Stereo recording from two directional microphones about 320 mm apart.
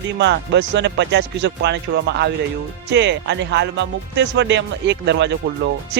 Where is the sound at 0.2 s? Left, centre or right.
Right.